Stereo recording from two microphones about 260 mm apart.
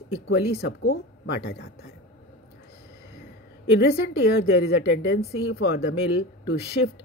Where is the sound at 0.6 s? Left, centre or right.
Left.